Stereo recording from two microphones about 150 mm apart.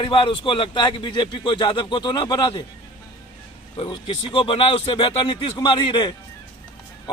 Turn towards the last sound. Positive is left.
turn(degrees=30)  # may be behind; listen again after turning